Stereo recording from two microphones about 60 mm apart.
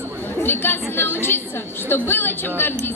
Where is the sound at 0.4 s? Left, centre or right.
Left.